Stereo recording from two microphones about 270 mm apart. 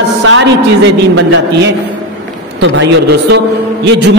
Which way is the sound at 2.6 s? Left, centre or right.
Right.